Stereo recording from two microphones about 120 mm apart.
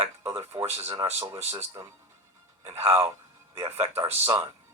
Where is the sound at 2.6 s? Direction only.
60° right (ahead or behind).